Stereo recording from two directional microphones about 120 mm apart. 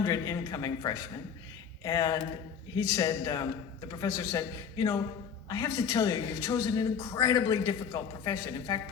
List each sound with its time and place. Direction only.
0.0 s a man's voice: 30° left (ahead or behind)